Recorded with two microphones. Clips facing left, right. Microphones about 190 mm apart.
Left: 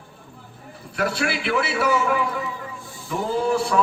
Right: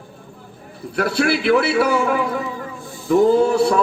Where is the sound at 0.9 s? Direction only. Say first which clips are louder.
Right 6 dB; 40° right (ahead or behind).